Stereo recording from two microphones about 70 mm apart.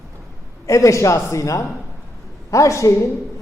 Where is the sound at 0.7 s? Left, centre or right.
Left.